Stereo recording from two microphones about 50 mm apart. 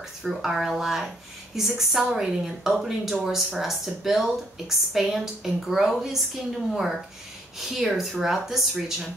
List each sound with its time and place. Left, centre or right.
0.4 s speech: centre
7.5 s speech: centre